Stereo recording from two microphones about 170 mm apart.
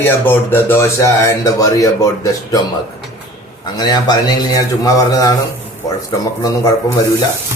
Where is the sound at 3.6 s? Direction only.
25° left (ahead or behind).